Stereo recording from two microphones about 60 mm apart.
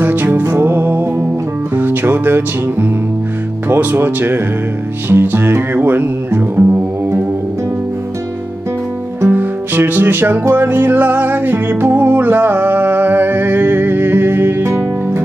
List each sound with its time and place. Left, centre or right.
0.0 s music: right
3.6 s speech: right
5.1 s music: right
9.3 s music: right